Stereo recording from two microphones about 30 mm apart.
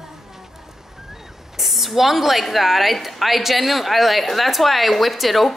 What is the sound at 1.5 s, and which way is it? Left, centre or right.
A woman's voice, centre.